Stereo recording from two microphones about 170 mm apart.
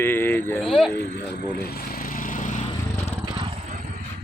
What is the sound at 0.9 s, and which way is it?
Speech, 70° left (ahead or behind).